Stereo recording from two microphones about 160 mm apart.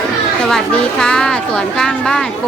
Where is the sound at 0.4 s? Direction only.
5° left (ahead or behind).